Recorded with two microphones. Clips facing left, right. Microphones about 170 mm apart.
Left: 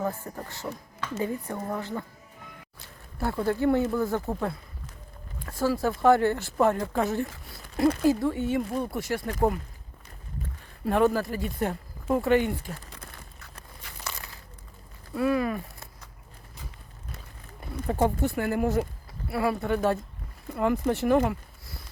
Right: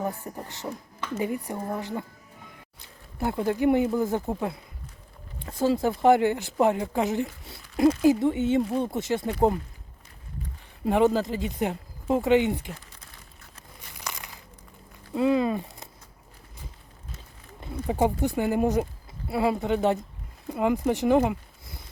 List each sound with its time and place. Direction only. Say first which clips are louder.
0.0 s speech: even; 15° right (ahead or behind)
3.2 s speech: right 1 dB; 15° right (ahead or behind)
10.8 s speech: right 2 dB; 20° right (ahead or behind)
12.9 s a sound: left 6 dB; 75° left (ahead or behind)
14.0 s a sound: right 1 dB; 15° right (ahead or behind)
15.1 s speech: right 3 dB; 20° right (ahead or behind)
17.8 s speech: right 1 dB; 15° right (ahead or behind)